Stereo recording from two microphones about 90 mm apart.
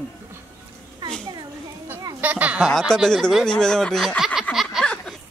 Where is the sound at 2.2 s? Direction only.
15° right (ahead or behind).